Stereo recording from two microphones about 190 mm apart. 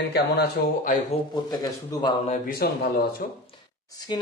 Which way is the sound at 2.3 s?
50° left (ahead or behind).